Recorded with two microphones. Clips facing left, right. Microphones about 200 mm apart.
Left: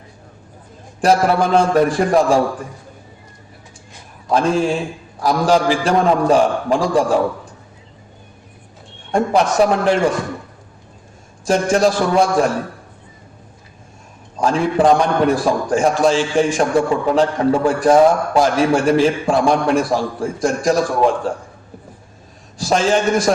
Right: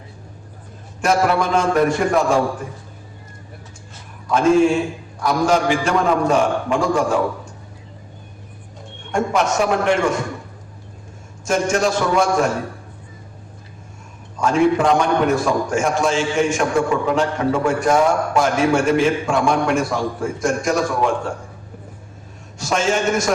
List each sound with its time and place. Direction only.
1.0 s a man's voice: 35° left (ahead or behind)
4.3 s a man's voice: 35° left (ahead or behind)
9.1 s a man's voice: 35° left (ahead or behind)
11.4 s a man's voice: 35° left (ahead or behind)
14.3 s a man's voice: 35° left (ahead or behind)
22.5 s a man's voice: 35° left (ahead or behind)